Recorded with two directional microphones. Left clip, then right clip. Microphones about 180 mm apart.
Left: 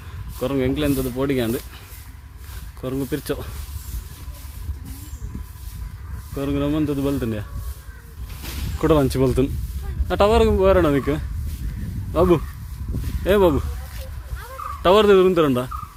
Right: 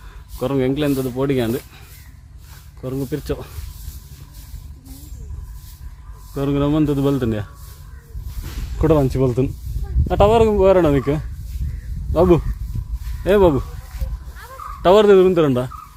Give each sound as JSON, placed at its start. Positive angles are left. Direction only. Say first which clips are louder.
{"t": 0.3, "sound": "speech", "louder": "right 3 dB", "side_deg": -15}
{"t": 2.8, "sound": "speech", "louder": "even", "side_deg": 5}
{"t": 6.3, "sound": "speech", "louder": "right 4 dB", "side_deg": -30}
{"t": 8.8, "sound": "speech", "louder": "right 1 dB", "side_deg": 0}
{"t": 10.1, "sound": "speech", "louder": "right 3 dB", "side_deg": -5}
{"t": 14.8, "sound": "speech", "louder": "right 3 dB", "side_deg": -15}